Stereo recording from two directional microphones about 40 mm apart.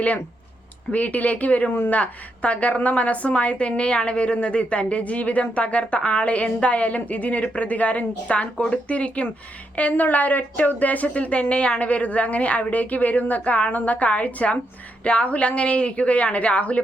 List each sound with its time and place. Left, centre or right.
0.9 s a woman's voice: left